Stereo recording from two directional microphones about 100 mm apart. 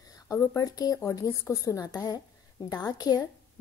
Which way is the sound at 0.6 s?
40° left (ahead or behind).